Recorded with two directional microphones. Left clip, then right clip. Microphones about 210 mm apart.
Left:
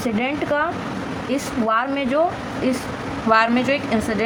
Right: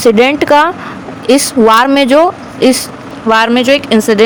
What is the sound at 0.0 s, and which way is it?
Speech, 55° right (ahead or behind).